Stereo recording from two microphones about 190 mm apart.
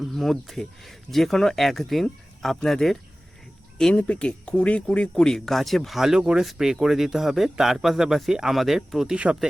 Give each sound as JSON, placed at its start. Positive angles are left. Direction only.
{"t": 0.0, "sound": "speech", "side_deg": 0}